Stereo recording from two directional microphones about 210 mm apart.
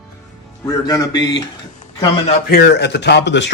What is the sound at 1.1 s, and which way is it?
Speech, 55° left (ahead or behind).